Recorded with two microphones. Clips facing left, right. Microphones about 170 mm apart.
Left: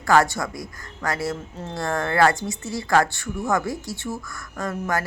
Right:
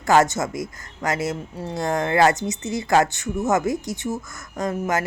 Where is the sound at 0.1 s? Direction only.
20° right (ahead or behind).